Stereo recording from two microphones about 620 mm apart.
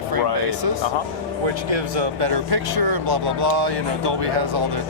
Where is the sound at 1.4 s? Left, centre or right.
Right.